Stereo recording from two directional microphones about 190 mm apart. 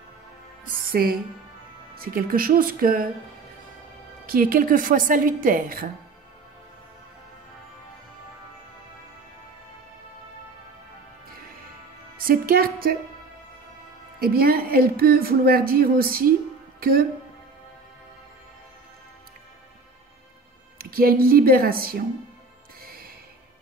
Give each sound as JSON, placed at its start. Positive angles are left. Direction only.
{"t": 2.0, "sound": "speech", "side_deg": -50}
{"t": 4.3, "sound": "speech", "side_deg": -50}
{"t": 12.2, "sound": "speech", "side_deg": -50}
{"t": 14.2, "sound": "speech", "side_deg": -50}
{"t": 20.7, "sound": "speech", "side_deg": -50}
{"t": 22.8, "sound": "music", "side_deg": -50}